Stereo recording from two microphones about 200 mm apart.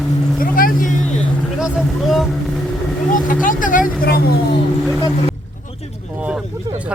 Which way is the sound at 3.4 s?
40° left (ahead or behind).